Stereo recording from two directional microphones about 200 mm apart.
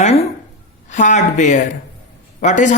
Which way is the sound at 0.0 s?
30° left (ahead or behind).